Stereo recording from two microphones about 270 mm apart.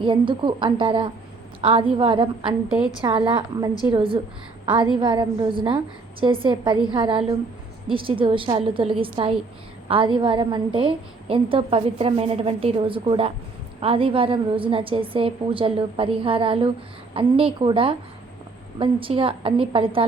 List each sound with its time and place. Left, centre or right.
0.0 s a woman's voice: centre